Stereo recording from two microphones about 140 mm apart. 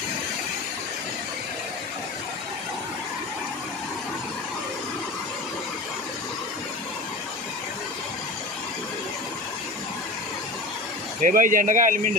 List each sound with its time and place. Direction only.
11.2 s speech: 70° right (ahead or behind)